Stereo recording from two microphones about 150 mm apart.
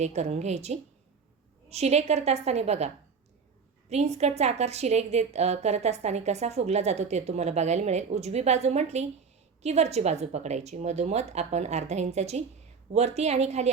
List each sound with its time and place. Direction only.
0.0 s a woman's voice: 45° right (ahead or behind)